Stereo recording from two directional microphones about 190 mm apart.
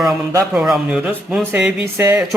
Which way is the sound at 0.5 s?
5° right (ahead or behind).